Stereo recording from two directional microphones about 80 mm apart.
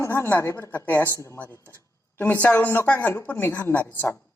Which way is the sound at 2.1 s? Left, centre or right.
Left.